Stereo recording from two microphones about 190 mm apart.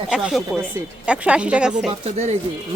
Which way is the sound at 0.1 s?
5° right (ahead or behind).